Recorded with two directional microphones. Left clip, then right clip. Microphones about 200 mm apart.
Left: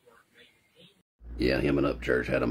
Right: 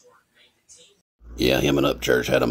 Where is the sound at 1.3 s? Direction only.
40° right (ahead or behind).